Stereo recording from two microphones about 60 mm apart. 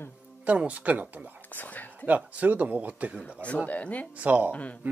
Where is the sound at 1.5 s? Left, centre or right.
Left.